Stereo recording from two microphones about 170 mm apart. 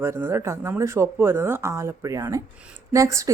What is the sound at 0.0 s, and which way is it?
A woman's voice, 15° right (ahead or behind).